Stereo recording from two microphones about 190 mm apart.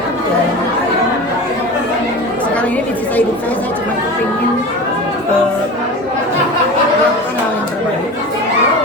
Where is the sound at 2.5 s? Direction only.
10° left (ahead or behind).